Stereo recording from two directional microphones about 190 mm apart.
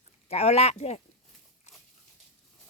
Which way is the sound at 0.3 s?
35° left (ahead or behind).